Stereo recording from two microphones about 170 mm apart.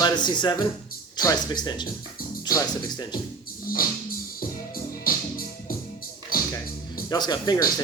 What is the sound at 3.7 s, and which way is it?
Music, 60° left (ahead or behind).